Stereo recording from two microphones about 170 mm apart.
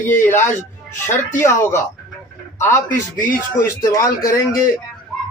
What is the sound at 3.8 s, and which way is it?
Speech, 20° left (ahead or behind).